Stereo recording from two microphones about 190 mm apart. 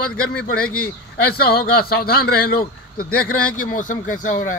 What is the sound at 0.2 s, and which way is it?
A man's voice, 55° left (ahead or behind).